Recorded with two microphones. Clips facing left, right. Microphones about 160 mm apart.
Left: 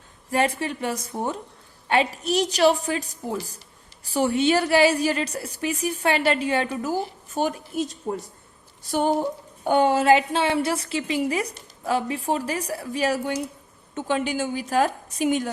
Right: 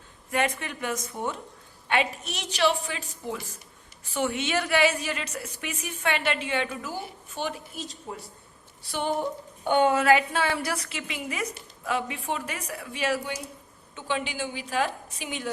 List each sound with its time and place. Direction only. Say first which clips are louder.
0.3 s a woman's voice: left 4 dB; 35° left (ahead or behind)